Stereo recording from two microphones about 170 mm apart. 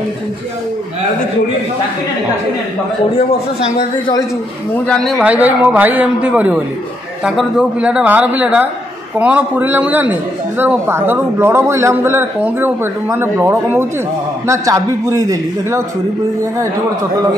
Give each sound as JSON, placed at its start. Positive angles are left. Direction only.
{"t": 4.8, "sound": "a man's voice", "side_deg": 0}